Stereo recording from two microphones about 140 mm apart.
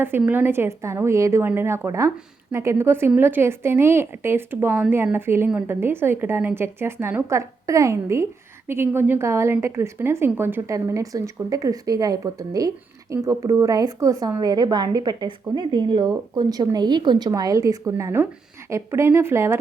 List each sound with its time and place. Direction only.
0.0 s a woman's voice: 15° right (ahead or behind)